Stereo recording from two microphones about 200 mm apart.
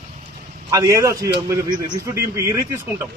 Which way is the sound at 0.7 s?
15° right (ahead or behind).